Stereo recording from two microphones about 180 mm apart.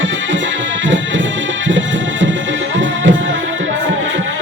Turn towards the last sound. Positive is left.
turn(degrees=-90)